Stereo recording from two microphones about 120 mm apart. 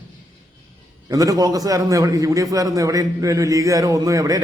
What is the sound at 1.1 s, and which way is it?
A man's voice, 30° right (ahead or behind).